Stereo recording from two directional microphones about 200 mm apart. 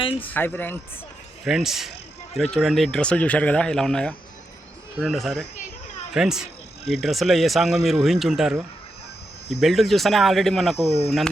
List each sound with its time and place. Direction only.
0.0 s speech: 25° left (ahead or behind)
0.3 s speech: 10° left (ahead or behind)
1.5 s speech: centre (ahead or behind)